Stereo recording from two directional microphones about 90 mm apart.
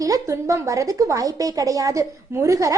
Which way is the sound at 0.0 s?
35° right (ahead or behind).